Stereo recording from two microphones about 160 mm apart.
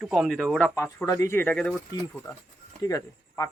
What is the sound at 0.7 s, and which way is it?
Speech, 20° left (ahead or behind).